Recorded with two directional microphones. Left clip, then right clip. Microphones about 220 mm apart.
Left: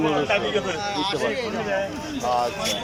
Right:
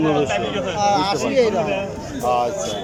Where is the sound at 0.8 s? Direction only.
40° right (ahead or behind).